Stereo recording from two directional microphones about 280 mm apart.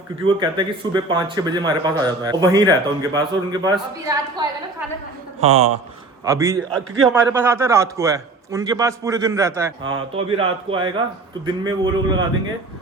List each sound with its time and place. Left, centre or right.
0.3 s speech: centre
5.4 s a man's voice: right
6.2 s speech: centre